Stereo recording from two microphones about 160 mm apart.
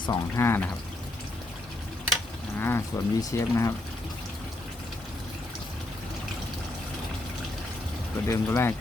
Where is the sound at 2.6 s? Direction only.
15° left (ahead or behind).